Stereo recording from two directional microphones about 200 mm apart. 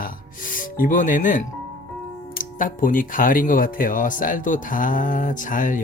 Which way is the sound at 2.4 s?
40° left (ahead or behind).